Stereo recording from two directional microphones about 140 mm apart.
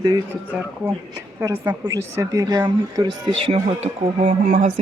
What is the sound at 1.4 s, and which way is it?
Speech, 20° right (ahead or behind).